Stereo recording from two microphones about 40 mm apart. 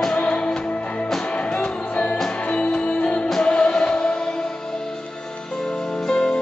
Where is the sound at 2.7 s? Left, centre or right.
Left.